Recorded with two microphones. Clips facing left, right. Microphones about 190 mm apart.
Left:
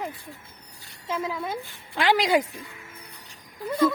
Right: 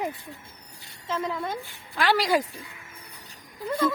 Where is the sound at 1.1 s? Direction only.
5° left (ahead or behind).